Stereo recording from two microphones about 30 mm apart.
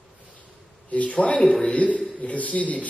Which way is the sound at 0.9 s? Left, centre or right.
Left.